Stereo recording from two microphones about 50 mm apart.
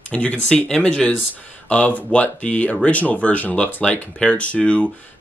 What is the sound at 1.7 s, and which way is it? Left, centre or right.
Speech, left.